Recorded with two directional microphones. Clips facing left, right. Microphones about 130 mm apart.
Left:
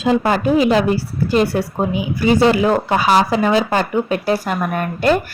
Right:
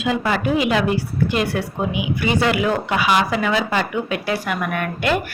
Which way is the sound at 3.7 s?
40° left (ahead or behind).